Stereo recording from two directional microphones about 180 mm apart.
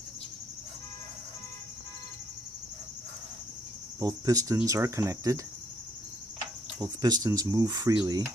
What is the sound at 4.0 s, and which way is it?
Speech, 20° right (ahead or behind).